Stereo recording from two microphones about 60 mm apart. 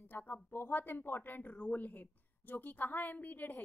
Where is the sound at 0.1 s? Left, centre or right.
Left.